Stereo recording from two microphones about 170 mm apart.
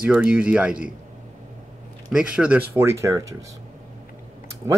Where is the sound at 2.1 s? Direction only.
5° right (ahead or behind).